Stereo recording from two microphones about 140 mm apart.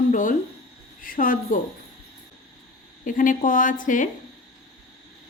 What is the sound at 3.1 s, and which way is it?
Speech, 70° left (ahead or behind).